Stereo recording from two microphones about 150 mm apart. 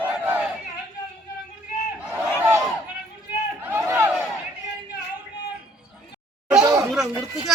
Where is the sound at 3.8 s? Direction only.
20° right (ahead or behind).